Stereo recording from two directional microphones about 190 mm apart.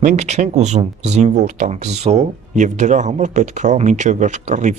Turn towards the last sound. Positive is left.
turn(degrees=-40)  # may be behind; listen again after turning